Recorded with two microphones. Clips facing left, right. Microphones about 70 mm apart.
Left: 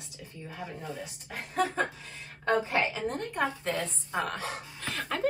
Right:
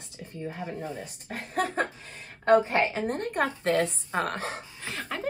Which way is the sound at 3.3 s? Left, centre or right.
Right.